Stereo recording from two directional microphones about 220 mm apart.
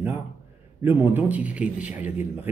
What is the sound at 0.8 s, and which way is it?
Speech, 10° right (ahead or behind).